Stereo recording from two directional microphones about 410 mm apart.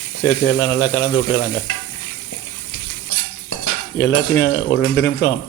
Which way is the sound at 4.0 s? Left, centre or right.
Left.